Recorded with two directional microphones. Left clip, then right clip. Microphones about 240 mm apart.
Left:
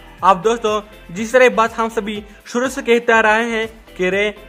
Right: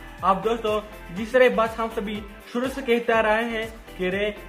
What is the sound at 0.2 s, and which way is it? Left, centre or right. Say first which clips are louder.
Speech: left 8 dB; left.